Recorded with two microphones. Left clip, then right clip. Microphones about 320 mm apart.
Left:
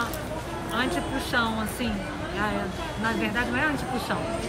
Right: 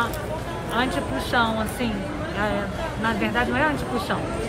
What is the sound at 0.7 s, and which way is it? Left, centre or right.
A woman's voice, centre.